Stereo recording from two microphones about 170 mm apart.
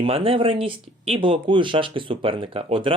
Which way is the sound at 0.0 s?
35° right (ahead or behind).